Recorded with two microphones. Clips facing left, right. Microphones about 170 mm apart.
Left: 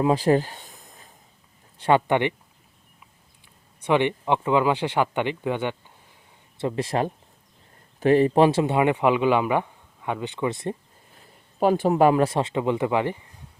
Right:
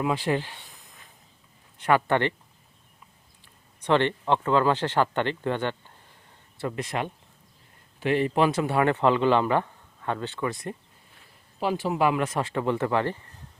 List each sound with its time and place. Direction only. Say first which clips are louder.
0.0 s a sound: left 6 dB; 40° left (ahead or behind)
2.0 s speech: left 2 dB; 15° left (ahead or behind)
3.8 s speech: left 1 dB; 10° left (ahead or behind)
6.6 s speech: left 5 dB; 25° left (ahead or behind)
11.6 s speech: left 6 dB; 50° left (ahead or behind); by 13.4 s 15° left (ahead or behind)